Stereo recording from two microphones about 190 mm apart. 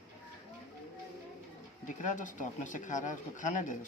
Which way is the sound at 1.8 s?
40° left (ahead or behind).